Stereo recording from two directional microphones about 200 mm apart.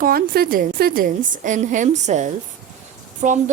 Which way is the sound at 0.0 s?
50° right (ahead or behind).